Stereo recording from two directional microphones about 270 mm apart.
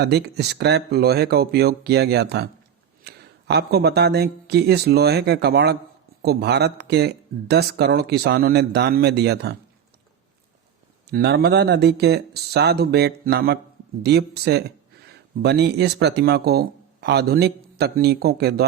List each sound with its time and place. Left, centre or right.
0.0 s speech: right
11.1 s speech: right